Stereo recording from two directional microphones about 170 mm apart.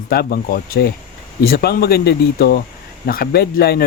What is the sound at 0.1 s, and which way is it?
Speech, 65° left (ahead or behind).